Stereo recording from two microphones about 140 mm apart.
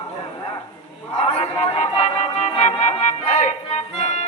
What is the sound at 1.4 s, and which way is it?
Music, 50° left (ahead or behind).